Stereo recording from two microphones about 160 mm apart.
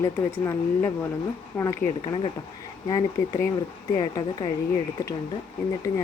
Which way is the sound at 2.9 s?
20° left (ahead or behind).